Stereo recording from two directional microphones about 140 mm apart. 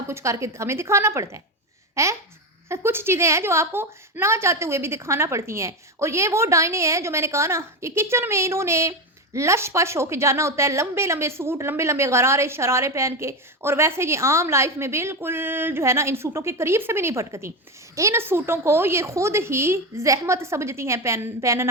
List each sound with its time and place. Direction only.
0.1 s a woman's voice: 20° right (ahead or behind)